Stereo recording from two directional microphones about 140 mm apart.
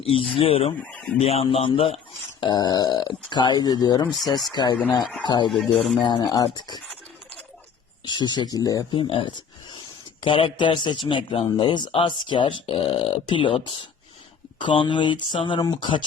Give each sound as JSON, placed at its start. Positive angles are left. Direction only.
{"t": 0.0, "sound": "a man's voice", "side_deg": 45}
{"t": 0.8, "sound": "speech", "side_deg": 10}
{"t": 1.2, "sound": "a man's voice", "side_deg": 45}
{"t": 2.4, "sound": "speech", "side_deg": 30}
{"t": 5.5, "sound": "speech", "side_deg": 0}
{"t": 6.0, "sound": "speech", "side_deg": 30}
{"t": 8.0, "sound": "speech", "side_deg": 30}
{"t": 9.0, "sound": "speech", "side_deg": 40}